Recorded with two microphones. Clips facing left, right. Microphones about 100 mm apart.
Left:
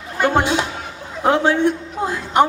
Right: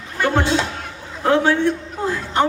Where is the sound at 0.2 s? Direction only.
15° left (ahead or behind).